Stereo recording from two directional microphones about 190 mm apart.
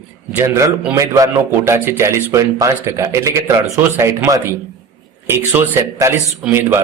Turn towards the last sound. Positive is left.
turn(degrees=-10)  # may be behind; listen again after turning